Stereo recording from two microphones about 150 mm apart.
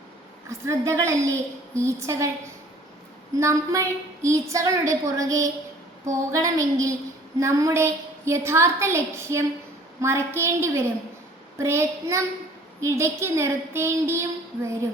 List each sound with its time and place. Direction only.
0.6 s a woman's voice: 20° right (ahead or behind)
3.3 s a woman's voice: 20° right (ahead or behind)